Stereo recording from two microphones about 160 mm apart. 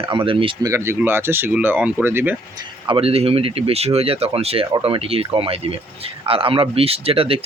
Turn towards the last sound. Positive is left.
turn(degrees=-35)  # may be behind; listen again after turning